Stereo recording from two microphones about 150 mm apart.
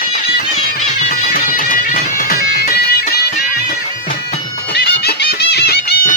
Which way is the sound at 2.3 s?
75° left (ahead or behind).